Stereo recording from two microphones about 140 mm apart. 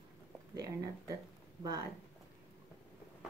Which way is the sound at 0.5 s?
25° right (ahead or behind).